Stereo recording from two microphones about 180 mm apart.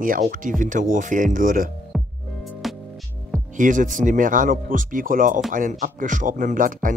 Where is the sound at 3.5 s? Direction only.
45° right (ahead or behind).